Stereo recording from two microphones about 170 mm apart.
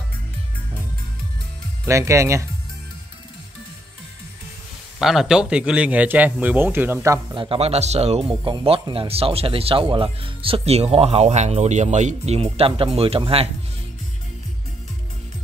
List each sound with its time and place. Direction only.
1.9 s a man's voice: 15° right (ahead or behind)
4.9 s a man's voice: centre (ahead or behind)
7.3 s speech: 35° right (ahead or behind)